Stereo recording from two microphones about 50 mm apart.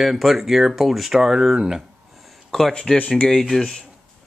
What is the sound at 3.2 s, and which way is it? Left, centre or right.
Speech, centre.